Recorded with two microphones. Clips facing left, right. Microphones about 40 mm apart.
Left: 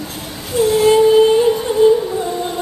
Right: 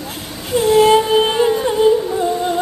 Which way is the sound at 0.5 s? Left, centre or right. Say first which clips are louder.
Right 1 dB; centre.